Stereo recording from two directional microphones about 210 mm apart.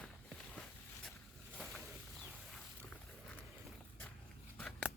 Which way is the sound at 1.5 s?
5° left (ahead or behind).